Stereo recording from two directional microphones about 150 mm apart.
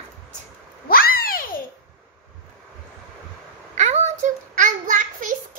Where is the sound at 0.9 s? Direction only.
80° left.